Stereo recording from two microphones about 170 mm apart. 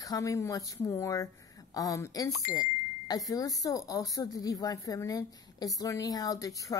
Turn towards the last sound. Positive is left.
turn(degrees=20)  # may be behind; listen again after turning